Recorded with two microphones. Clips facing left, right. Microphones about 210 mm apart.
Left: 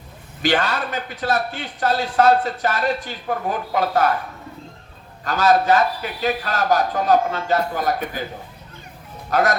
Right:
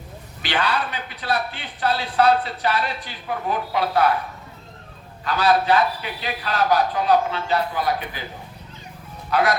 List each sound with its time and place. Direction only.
0.4 s speech: 45° left (ahead or behind)
5.2 s speech: 45° left (ahead or behind)
9.3 s speech: 45° left (ahead or behind)